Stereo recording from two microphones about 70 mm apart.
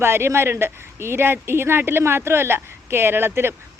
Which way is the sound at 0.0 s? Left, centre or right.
Right.